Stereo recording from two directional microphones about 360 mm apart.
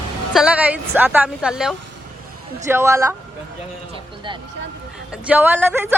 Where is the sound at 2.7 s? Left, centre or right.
Centre.